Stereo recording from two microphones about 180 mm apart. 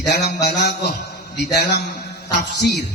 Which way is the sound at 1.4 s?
65° left (ahead or behind).